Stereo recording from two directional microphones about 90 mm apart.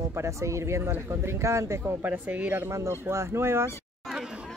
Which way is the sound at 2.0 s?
15° right (ahead or behind).